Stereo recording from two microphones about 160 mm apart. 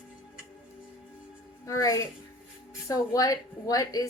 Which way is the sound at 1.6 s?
20° left (ahead or behind).